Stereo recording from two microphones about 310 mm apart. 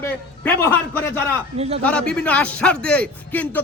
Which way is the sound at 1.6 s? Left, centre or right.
Centre.